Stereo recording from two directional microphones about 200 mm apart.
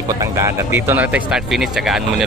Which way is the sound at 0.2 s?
15° right (ahead or behind).